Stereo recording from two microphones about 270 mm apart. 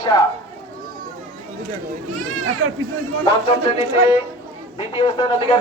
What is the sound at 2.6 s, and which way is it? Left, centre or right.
Speech, right.